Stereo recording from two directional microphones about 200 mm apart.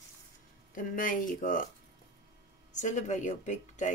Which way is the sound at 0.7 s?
45° left (ahead or behind).